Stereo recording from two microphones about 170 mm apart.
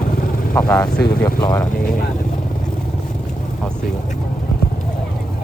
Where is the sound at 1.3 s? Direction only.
20° left (ahead or behind).